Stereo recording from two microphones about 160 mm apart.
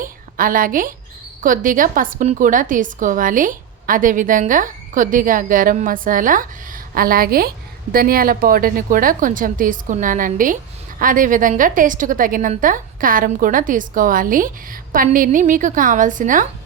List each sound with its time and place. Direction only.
0.0 s a woman's voice: 60° right (ahead or behind)